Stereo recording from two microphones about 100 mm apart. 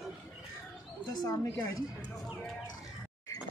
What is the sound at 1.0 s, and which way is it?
Speech, 40° left (ahead or behind).